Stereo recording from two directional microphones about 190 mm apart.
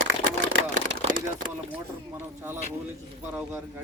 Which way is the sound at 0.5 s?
80° right.